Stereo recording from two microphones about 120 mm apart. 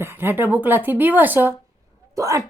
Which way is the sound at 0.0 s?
20° right (ahead or behind).